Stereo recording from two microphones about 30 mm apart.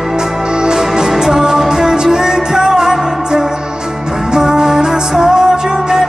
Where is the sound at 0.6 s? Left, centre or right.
Right.